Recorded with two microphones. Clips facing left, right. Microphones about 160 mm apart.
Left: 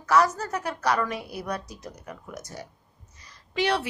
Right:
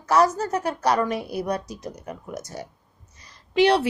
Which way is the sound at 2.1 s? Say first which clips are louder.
Right 5 dB; 30° right (ahead or behind).